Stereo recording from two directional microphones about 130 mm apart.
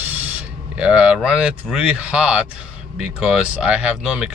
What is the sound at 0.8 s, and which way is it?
Speech, 10° right (ahead or behind).